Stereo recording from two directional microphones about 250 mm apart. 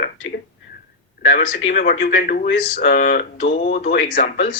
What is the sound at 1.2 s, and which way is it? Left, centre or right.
Speech, left.